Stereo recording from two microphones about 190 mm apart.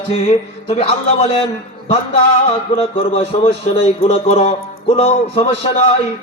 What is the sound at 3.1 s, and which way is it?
Speech, 30° left (ahead or behind).